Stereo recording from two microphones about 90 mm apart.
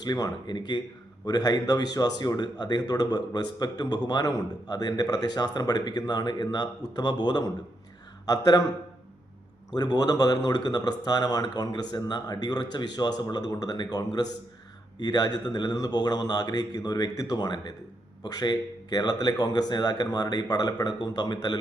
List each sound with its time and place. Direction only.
0.0 s speech: 50° left (ahead or behind)
9.7 s speech: 50° left (ahead or behind)